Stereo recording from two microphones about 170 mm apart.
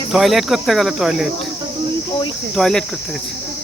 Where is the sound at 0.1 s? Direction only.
Centre (ahead or behind).